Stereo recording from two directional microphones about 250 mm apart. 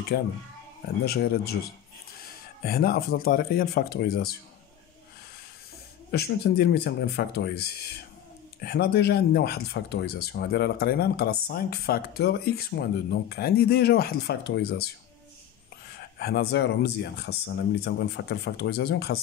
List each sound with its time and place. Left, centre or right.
0.1 s speech: left
6.1 s speech: left
16.0 s a man's voice: left